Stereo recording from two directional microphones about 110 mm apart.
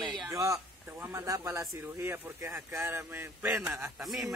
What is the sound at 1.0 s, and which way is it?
Speech, 25° right (ahead or behind).